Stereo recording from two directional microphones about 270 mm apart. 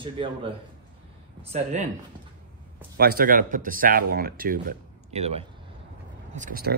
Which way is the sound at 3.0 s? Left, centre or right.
Right.